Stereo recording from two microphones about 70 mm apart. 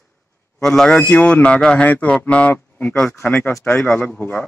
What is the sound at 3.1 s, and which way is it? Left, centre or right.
Speech, left.